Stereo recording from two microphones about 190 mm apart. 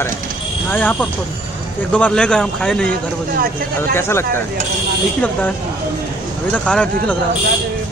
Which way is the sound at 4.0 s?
15° left (ahead or behind).